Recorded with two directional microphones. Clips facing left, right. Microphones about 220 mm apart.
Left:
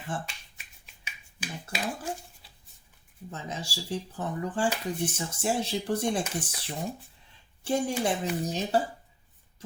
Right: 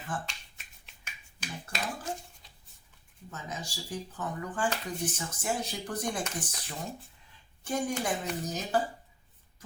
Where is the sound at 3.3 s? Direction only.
30° left (ahead or behind).